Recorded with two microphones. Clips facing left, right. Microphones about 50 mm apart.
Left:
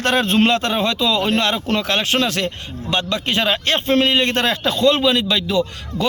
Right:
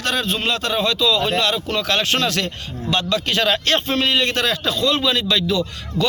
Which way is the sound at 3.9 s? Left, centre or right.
Left.